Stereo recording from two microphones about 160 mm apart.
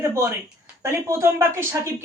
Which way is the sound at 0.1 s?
20° right (ahead or behind).